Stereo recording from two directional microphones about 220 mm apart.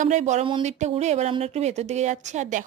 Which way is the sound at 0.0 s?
35° right (ahead or behind).